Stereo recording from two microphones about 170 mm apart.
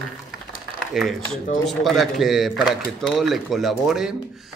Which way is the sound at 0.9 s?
Centre (ahead or behind).